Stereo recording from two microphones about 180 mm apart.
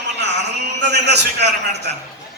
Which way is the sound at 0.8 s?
70° right (ahead or behind).